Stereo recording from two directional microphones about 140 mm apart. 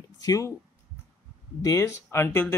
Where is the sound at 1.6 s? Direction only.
25° left (ahead or behind).